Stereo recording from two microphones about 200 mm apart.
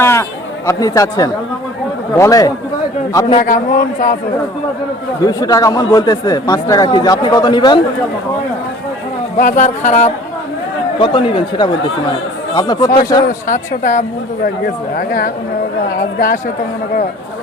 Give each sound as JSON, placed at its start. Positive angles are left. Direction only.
{"t": 0.0, "sound": "speech", "side_deg": 15}
{"t": 3.4, "sound": "a man's voice", "side_deg": 40}
{"t": 5.2, "sound": "speech", "side_deg": 20}
{"t": 9.4, "sound": "speech", "side_deg": 40}
{"t": 11.0, "sound": "speech", "side_deg": 25}
{"t": 13.5, "sound": "a man's voice", "side_deg": 40}